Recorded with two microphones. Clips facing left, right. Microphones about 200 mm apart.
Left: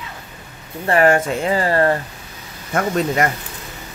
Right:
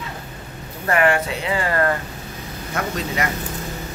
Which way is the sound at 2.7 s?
50° left (ahead or behind).